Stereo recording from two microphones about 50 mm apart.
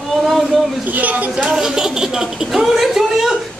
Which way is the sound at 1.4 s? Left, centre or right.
Centre.